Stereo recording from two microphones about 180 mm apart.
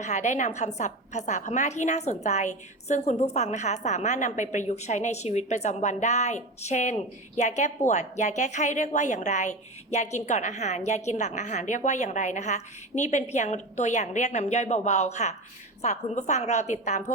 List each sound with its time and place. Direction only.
0.0 s a woman's voice: 40° left (ahead or behind)